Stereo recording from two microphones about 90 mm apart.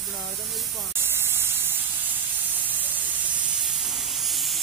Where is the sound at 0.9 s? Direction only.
25° right (ahead or behind).